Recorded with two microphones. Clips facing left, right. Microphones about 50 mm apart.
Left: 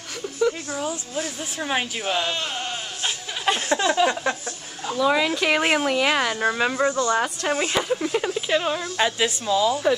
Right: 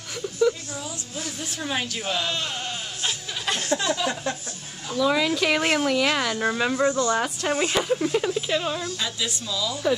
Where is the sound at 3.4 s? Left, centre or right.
Left.